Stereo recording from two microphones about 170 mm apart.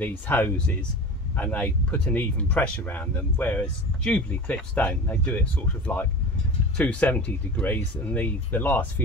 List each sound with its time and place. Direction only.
0.0 s speech: 10° left (ahead or behind)
6.8 s speech: 10° left (ahead or behind)